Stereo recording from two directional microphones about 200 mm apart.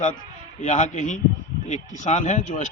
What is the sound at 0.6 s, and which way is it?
A man's voice, 35° left (ahead or behind).